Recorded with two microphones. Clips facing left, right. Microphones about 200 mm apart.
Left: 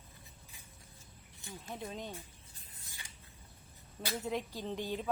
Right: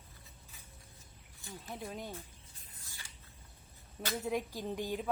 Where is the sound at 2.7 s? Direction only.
20° left (ahead or behind).